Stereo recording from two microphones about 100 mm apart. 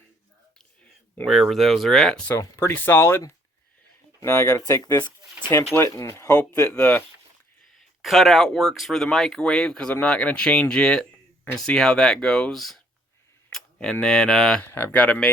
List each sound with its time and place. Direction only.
1.3 s speech: centre (ahead or behind)
2.4 s speech: 20° left (ahead or behind)
5.7 s speech: 30° left (ahead or behind)
6.7 s speech: 15° left (ahead or behind)
7.8 s speech: centre (ahead or behind)
13.5 s camera: 5° left (ahead or behind)
14.0 s speech: 5° left (ahead or behind)
14.6 s speech: 25° left (ahead or behind)